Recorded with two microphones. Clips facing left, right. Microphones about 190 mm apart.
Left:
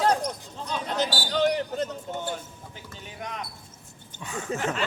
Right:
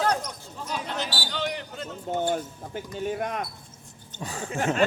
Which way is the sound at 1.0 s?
40° left (ahead or behind).